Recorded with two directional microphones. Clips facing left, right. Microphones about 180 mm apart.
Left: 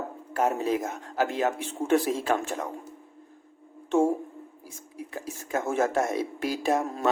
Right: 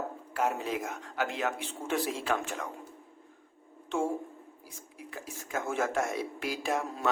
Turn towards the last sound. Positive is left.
turn(degrees=40)  # may be behind; listen again after turning